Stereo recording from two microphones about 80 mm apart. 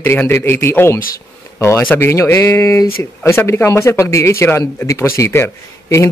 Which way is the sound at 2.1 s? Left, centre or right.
Left.